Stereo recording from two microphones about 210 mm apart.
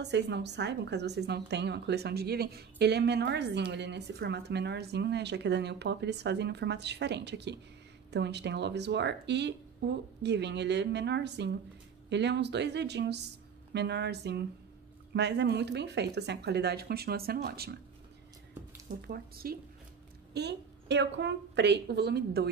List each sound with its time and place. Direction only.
0.0 s speech: 55° right (ahead or behind)
18.9 s speech: 45° right (ahead or behind)